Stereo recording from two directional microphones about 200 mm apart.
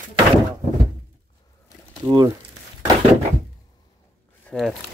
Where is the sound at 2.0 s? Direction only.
20° right (ahead or behind).